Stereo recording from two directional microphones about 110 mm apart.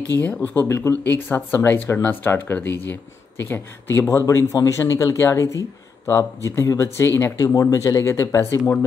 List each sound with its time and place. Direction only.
0.2 s speech: 15° left (ahead or behind)
4.3 s speech: 30° left (ahead or behind)